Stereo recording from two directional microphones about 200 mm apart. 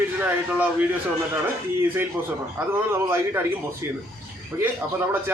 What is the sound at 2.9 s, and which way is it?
Speech, 10° right (ahead or behind).